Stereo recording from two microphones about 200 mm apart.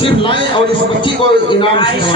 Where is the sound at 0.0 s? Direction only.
25° left (ahead or behind).